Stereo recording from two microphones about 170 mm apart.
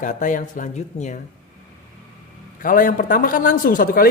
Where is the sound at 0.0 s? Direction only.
50° left (ahead or behind).